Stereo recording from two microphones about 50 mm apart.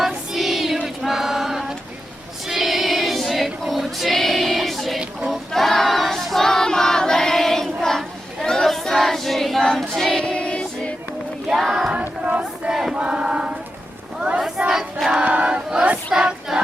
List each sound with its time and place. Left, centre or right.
0.3 s a sound: centre
1.0 s chant: centre
2.5 s choir: centre
10.2 s music: left
11.5 s choir: centre
11.9 s battle cry: right
12.7 s a sound: centre
13.0 s chant: centre
14.6 s choir: right